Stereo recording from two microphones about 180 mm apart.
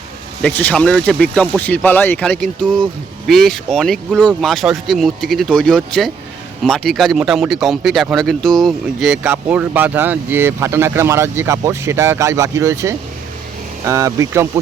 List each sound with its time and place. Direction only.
0.4 s speech: 5° left (ahead or behind); by 14.6 s 15° right (ahead or behind)